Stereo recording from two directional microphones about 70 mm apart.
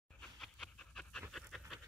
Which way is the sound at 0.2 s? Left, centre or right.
Centre.